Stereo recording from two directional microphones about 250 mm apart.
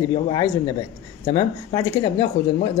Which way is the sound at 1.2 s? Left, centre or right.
Centre.